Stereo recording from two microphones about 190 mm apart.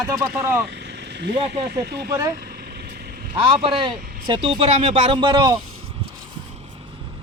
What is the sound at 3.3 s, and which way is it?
Speech, 25° right (ahead or behind).